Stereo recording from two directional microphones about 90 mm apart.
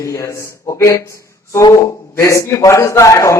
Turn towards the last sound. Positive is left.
turn(degrees=35)  # may be behind; listen again after turning